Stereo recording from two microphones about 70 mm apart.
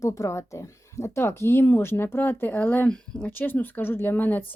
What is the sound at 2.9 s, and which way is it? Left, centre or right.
Speech, centre.